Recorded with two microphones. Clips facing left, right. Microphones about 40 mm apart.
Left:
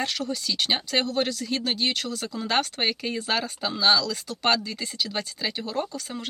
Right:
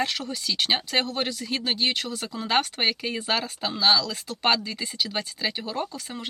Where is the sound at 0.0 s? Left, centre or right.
Centre.